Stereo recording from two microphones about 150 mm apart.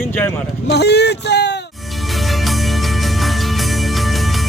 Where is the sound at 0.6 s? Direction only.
90° left.